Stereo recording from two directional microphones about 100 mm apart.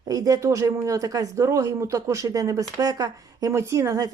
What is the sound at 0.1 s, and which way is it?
Speech, 35° right (ahead or behind).